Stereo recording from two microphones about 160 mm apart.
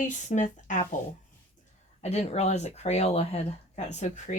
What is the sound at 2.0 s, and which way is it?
Speech, 40° left (ahead or behind).